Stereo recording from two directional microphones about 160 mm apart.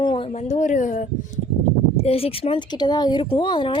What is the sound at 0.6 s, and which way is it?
Speech, 50° left (ahead or behind).